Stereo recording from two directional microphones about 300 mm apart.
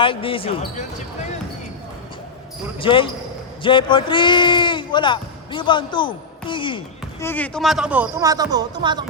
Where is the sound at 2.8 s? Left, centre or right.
Centre.